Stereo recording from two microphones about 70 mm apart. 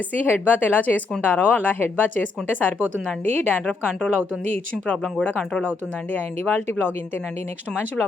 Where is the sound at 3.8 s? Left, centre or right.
Centre.